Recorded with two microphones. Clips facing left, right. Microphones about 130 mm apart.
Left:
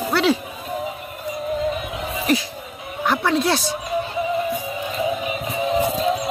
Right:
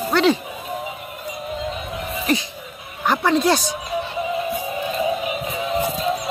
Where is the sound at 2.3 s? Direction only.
Centre (ahead or behind).